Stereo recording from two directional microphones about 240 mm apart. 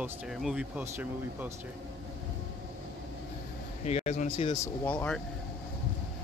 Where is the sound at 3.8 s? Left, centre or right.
Left.